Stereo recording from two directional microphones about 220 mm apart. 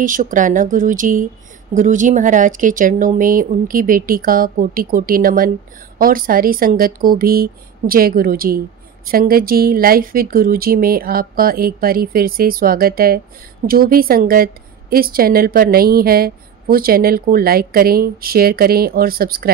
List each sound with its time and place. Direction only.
0.0 s a woman's voice: 35° right (ahead or behind)